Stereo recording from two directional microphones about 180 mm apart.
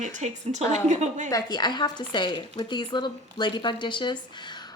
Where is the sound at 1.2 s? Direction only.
20° left (ahead or behind).